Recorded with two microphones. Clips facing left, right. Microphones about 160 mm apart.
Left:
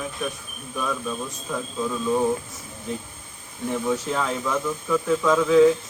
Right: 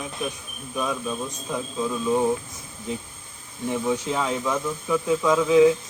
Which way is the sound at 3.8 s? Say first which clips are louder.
Even; 15° right (ahead or behind).